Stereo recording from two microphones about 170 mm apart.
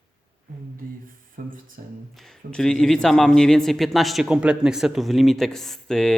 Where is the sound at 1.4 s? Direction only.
55° right (ahead or behind).